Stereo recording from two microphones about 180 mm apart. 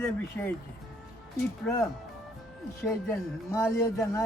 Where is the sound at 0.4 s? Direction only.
10° left (ahead or behind).